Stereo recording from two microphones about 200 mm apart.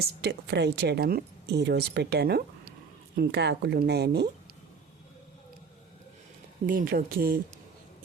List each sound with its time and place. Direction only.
0.0 s speech: 55° right (ahead or behind)
6.7 s speech: 45° right (ahead or behind)